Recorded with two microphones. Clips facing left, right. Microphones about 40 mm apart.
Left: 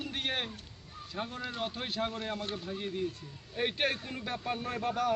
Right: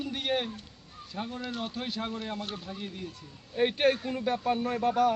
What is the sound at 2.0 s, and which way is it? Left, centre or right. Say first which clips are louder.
A man's voice: even; centre.